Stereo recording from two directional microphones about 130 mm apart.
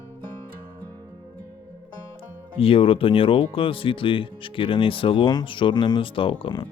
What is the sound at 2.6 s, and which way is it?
Speech, 45° left (ahead or behind).